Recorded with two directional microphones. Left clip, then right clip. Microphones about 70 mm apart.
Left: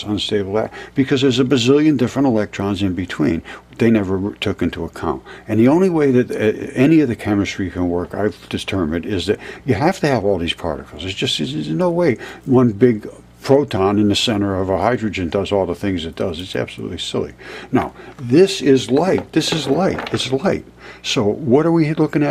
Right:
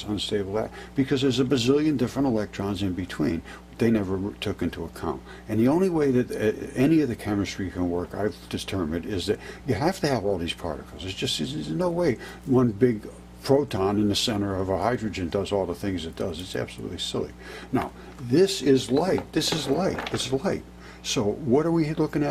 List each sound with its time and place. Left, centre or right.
0.0 s speech: centre